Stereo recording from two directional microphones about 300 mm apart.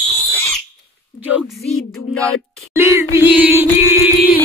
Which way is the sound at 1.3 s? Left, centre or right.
Centre.